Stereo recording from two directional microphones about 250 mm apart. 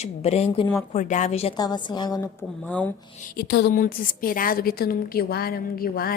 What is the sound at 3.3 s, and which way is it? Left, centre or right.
A woman's voice, left.